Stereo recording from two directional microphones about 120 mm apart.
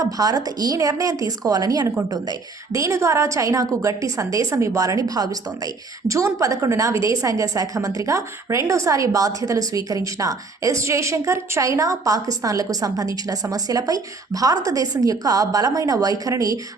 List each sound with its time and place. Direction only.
0.0 s a woman's voice: 30° right (ahead or behind)